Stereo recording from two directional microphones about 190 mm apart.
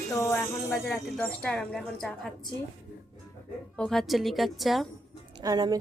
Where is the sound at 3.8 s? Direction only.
Centre (ahead or behind).